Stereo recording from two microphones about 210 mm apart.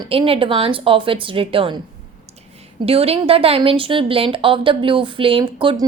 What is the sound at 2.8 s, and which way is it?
A woman's voice, 30° right (ahead or behind).